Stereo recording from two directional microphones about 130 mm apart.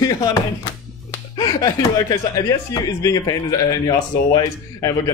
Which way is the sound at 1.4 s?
25° left (ahead or behind).